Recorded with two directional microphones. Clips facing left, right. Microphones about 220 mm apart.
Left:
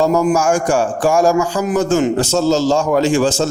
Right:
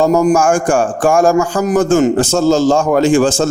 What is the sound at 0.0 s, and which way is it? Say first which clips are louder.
A man's voice: right 3 dB; 45° right (ahead or behind).